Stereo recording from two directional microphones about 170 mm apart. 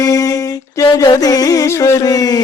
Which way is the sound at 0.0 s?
20° left (ahead or behind).